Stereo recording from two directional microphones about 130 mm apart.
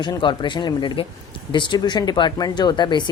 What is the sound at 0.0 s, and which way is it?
Speech, 35° left (ahead or behind).